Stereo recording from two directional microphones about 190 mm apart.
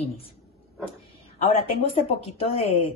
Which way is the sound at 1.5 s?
35° left (ahead or behind).